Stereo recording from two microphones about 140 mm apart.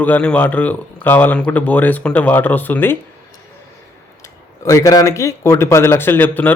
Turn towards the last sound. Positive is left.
turn(degrees=10)  # may be behind; listen again after turning